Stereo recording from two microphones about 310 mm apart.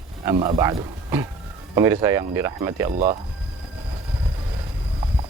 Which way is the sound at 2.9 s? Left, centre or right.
Right.